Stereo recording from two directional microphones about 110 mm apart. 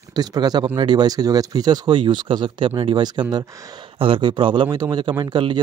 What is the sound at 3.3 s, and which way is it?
Speech, 30° right (ahead or behind).